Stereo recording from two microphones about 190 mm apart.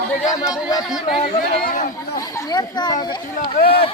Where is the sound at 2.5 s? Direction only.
20° left (ahead or behind).